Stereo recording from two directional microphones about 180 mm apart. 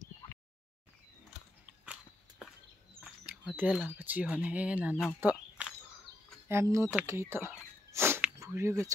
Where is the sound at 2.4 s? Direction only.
5° right (ahead or behind).